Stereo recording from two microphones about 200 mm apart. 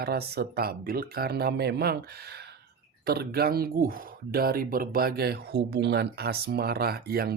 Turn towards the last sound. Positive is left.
turn(degrees=-50)  # may be behind; listen again after turning